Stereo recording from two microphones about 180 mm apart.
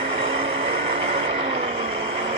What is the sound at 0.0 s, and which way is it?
Vehicle, 30° right (ahead or behind).